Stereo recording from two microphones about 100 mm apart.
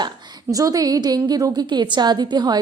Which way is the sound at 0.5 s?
35° right (ahead or behind).